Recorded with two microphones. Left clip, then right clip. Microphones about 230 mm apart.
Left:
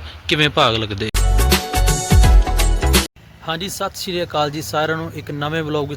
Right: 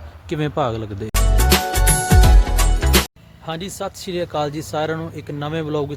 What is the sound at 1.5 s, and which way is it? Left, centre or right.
Music, centre.